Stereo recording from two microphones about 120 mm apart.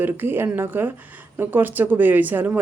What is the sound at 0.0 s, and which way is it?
A woman's voice, 15° right (ahead or behind).